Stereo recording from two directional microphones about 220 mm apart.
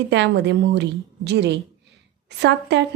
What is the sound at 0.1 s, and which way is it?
A woman's voice, 50° right (ahead or behind).